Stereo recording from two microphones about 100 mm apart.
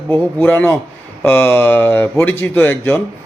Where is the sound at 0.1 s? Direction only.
20° left (ahead or behind).